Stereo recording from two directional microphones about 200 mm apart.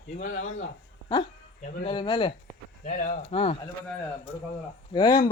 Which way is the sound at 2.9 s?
40° left (ahead or behind).